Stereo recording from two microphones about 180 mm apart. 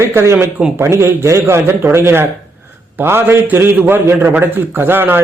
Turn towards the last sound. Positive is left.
turn(degrees=-10)  # may be behind; listen again after turning